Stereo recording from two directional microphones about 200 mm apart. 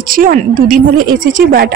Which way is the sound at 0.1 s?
45° right (ahead or behind).